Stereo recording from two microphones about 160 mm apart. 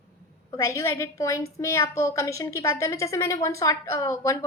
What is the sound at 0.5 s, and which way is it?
A woman's voice, 20° left (ahead or behind).